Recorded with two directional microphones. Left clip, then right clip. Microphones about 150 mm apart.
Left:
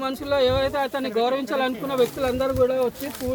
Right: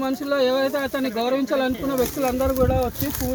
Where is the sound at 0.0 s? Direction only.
20° left (ahead or behind).